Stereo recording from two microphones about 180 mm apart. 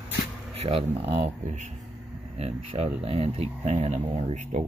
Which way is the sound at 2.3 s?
35° right (ahead or behind).